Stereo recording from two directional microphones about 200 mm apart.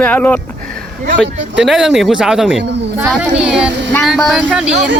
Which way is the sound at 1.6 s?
Centre (ahead or behind).